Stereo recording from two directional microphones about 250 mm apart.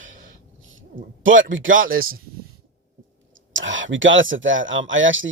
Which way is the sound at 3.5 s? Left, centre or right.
Right.